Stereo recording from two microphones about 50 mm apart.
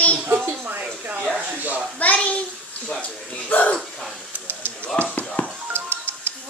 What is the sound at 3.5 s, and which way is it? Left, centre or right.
Speech, left.